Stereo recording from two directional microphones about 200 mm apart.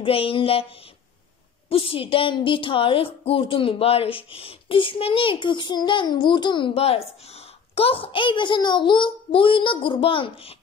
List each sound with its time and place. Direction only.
0.0 s a woman's voice: 25° left (ahead or behind)
1.7 s a woman's voice: 25° left (ahead or behind)